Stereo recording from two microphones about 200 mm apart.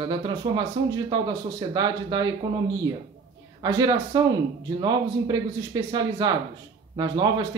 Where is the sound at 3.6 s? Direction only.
20° right (ahead or behind).